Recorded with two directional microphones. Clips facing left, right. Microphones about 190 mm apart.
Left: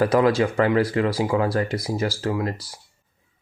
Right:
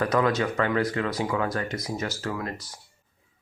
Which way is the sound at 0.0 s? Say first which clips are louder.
Left 5 dB; 30° left (ahead or behind).